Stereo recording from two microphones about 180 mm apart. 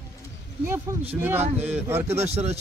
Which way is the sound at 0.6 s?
10° right (ahead or behind).